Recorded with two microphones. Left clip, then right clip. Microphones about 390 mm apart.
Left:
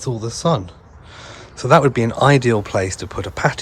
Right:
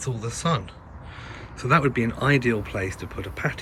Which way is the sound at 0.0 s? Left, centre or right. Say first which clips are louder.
Left 7 dB; centre.